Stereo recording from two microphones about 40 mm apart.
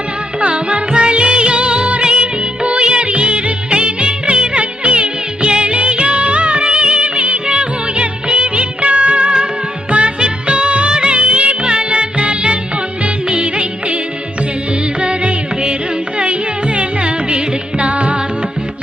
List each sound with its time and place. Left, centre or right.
0.4 s music: right
1.9 s music of bollywood: right
13.3 s music: right
15.0 s music: right
16.7 s music: right